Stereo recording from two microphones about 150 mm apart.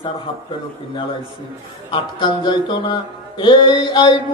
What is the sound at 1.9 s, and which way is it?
Speech, 30° left (ahead or behind).